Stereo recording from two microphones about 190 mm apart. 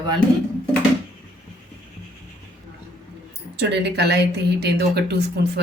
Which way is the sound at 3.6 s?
60° right (ahead or behind).